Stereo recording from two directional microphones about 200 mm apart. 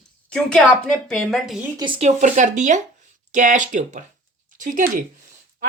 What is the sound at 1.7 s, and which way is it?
Speech, 25° right (ahead or behind).